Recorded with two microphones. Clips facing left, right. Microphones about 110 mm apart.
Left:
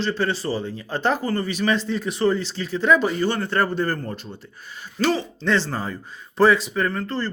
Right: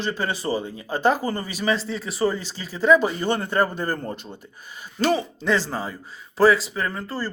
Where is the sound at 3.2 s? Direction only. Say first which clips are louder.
Even; 20° right (ahead or behind).